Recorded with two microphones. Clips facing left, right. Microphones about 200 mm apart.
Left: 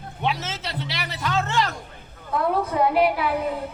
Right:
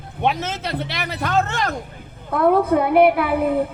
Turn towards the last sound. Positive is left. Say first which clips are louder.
# right 6 dB
turn(degrees=-55)  # may be behind; listen again after turning